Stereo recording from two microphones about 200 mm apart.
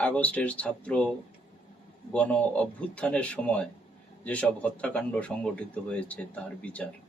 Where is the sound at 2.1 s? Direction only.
5° left (ahead or behind).